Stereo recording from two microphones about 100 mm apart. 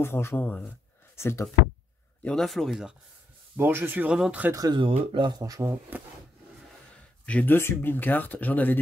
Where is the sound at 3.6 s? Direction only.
20° right (ahead or behind).